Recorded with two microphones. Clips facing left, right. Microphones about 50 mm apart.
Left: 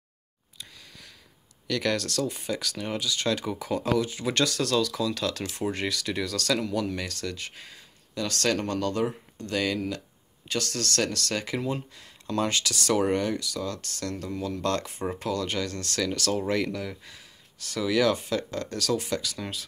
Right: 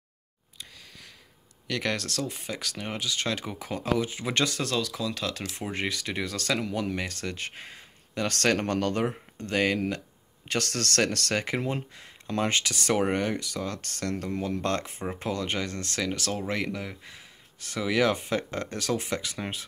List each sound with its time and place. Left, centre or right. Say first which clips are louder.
1.7 s speech: left 3 dB; centre; by 10.0 s right
10.4 s speech: right 1 dB; right